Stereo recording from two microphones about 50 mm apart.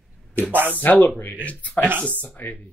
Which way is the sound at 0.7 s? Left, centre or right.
Left.